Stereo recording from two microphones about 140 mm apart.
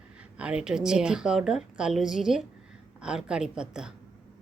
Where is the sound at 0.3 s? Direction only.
5° right (ahead or behind).